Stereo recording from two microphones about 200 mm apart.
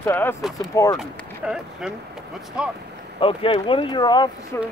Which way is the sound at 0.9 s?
5° right (ahead or behind).